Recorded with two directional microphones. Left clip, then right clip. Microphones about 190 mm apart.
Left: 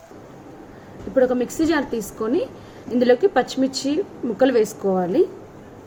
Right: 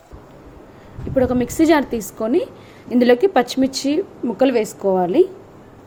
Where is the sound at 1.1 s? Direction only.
40° right (ahead or behind).